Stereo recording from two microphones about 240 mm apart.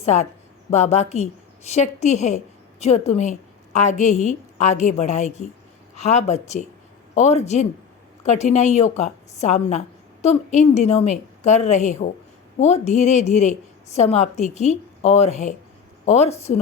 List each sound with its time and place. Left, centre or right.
0.0 s a woman's voice: left